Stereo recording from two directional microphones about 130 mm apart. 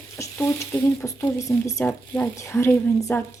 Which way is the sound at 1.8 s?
15° left (ahead or behind).